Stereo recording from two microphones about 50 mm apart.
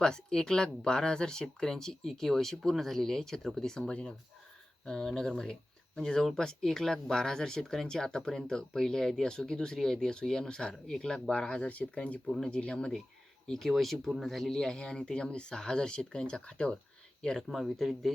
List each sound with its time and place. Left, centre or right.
0.0 s speech: centre
13.5 s speech: centre
17.5 s speech: centre